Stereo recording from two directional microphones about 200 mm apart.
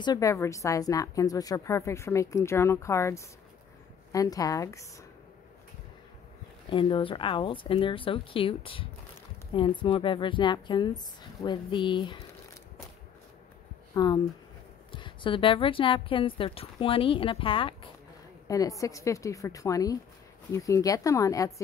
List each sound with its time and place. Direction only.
0.0 s a woman's voice: 20° left (ahead or behind)
6.7 s a woman's voice: 25° left (ahead or behind)
13.9 s a woman's voice: 20° left (ahead or behind)